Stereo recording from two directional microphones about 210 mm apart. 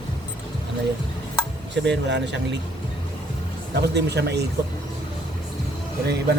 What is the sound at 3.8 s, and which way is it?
Speech, 50° right (ahead or behind).